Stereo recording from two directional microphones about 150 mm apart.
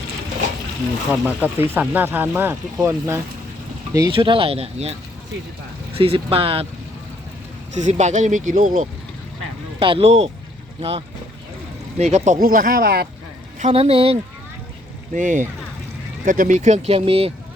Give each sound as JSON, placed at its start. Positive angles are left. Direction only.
{"t": 1.1, "sound": "speech", "side_deg": -10}
{"t": 4.1, "sound": "speech", "side_deg": -35}
{"t": 7.7, "sound": "speech", "side_deg": -55}
{"t": 9.8, "sound": "speech", "side_deg": -40}
{"t": 13.6, "sound": "speech", "side_deg": -45}
{"t": 15.1, "sound": "speech", "side_deg": -55}